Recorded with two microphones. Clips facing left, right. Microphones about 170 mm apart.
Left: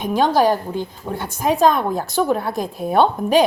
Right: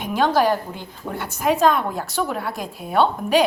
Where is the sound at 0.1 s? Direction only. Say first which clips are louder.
Left 2 dB; 20° left (ahead or behind).